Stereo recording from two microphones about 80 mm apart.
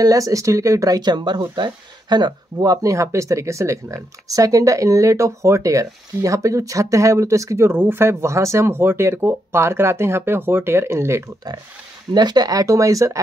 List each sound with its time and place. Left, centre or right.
0.0 s speech: right
12.1 s speech: right